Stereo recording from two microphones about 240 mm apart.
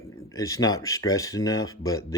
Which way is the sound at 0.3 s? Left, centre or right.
Centre.